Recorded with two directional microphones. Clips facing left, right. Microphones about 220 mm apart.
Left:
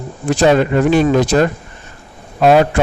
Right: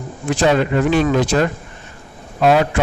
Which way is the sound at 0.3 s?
45° left (ahead or behind).